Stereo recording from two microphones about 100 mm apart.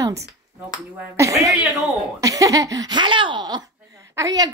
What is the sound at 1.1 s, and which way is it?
A woman's voice, 30° right (ahead or behind).